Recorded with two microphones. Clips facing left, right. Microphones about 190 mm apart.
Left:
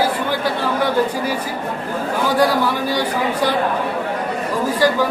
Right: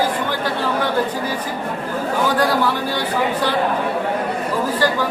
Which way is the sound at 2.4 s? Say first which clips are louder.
Left 2 dB; 10° left (ahead or behind).